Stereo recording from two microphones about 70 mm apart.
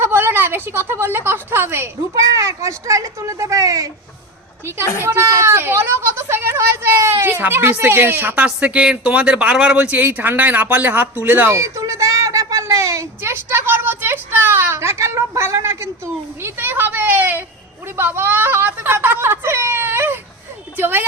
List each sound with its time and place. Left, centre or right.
0.0 s a woman's voice: right
2.4 s speech: right
5.0 s speech: right
8.4 s speech: centre; by 15.9 s right
16.4 s a woman's voice: right